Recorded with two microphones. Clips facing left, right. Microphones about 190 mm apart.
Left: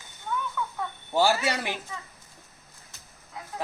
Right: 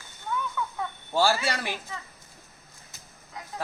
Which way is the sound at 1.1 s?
20° left (ahead or behind).